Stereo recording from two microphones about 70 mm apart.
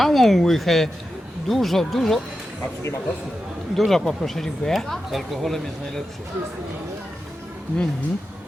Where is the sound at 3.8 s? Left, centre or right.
Centre.